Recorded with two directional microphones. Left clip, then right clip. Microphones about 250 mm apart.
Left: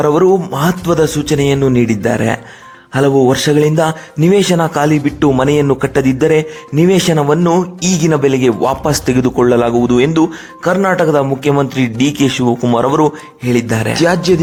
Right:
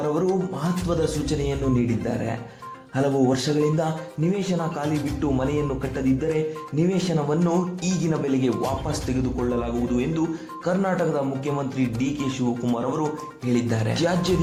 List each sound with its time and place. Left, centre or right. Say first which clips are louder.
0.0 s speech: left 13 dB; left